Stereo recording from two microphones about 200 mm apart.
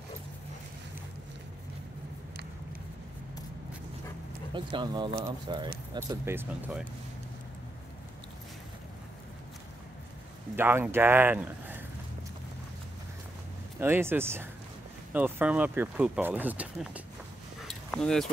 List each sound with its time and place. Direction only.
4.6 s speech: 25° right (ahead or behind)
5.9 s speech: 10° right (ahead or behind)
10.5 s speech: 10° right (ahead or behind)
13.7 s speech: 10° right (ahead or behind)
17.6 s dog: 5° left (ahead or behind)